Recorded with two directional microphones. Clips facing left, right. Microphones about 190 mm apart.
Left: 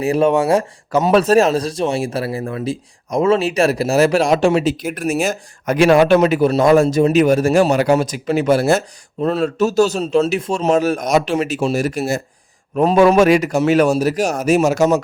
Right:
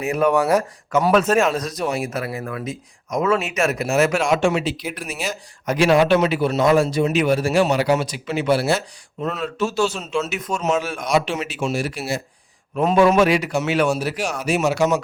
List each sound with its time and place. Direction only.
0.0 s a man's voice: 30° left (ahead or behind)